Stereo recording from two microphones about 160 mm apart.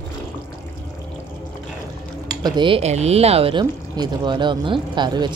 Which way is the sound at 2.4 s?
30° right (ahead or behind).